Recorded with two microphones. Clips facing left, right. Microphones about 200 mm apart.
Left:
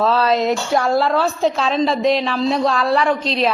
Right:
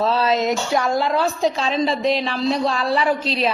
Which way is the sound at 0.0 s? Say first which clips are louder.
Left 2 dB; centre (ahead or behind).